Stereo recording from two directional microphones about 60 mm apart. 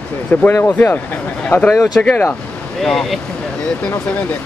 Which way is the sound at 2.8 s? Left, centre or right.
Centre.